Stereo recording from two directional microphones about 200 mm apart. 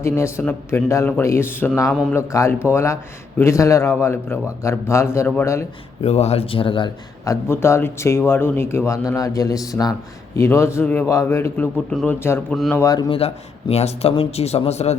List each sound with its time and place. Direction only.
0.0 s a man's voice: 15° left (ahead or behind)
2.2 s a man's voice: 15° left (ahead or behind)
6.0 s a man's voice: 30° left (ahead or behind); by 12.8 s centre (ahead or behind)
12.8 s speech: 20° left (ahead or behind)